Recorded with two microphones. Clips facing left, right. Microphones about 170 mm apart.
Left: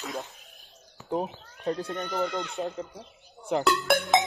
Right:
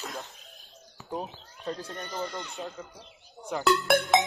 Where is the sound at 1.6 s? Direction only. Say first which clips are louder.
Left 6 dB; 55° left (ahead or behind).